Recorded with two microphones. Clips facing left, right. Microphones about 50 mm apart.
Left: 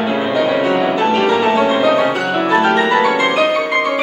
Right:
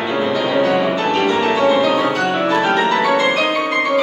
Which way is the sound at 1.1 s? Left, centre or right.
Centre.